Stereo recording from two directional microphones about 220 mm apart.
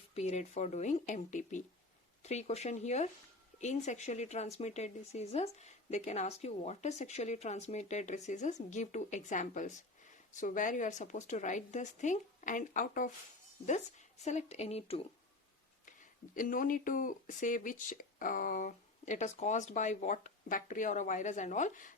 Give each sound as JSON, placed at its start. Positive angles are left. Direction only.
{"t": 0.1, "sound": "speech", "side_deg": 30}